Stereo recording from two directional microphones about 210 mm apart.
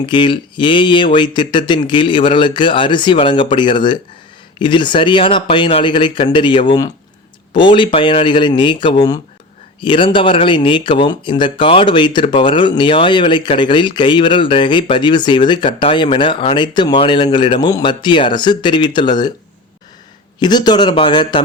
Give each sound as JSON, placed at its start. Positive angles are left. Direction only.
{"t": 0.0, "sound": "speech", "side_deg": 25}
{"t": 20.4, "sound": "speech", "side_deg": 20}